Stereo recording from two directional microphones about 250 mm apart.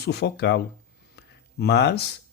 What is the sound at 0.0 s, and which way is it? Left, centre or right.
Speech, left.